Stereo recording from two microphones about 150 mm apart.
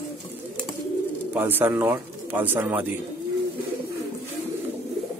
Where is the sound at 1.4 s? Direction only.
15° right (ahead or behind).